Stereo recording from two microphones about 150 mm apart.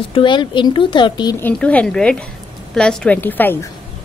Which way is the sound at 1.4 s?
10° left (ahead or behind).